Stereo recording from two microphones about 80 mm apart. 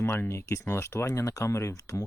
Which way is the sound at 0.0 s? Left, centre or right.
Left.